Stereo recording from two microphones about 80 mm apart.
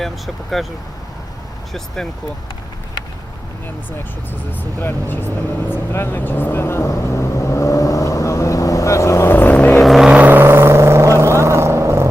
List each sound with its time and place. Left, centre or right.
0.6 s speech: centre
4.5 s vehicle: left
9.8 s vehicle: centre
10.1 s vehicle: right